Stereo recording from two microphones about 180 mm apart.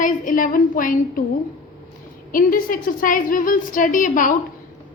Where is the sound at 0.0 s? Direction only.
45° left (ahead or behind).